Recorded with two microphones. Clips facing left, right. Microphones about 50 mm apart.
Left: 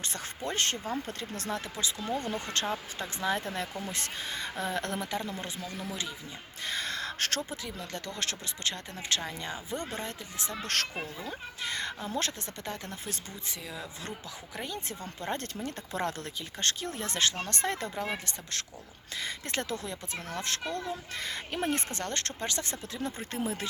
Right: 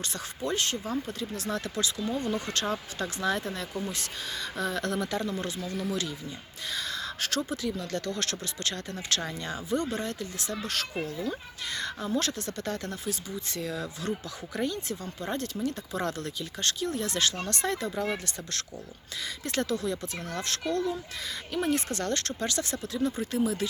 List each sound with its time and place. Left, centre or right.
0.0 s speech: left
1.5 s speech: left
2.1 s speech: left
6.7 s a sound: left
7.5 s speech: left
15.2 s speech: left
18.0 s speech: left
21.2 s speech: left
21.6 s speech: left